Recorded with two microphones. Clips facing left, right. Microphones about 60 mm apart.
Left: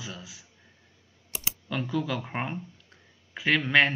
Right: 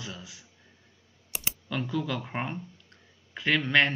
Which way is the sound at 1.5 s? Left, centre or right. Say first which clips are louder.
Left 1 dB; centre.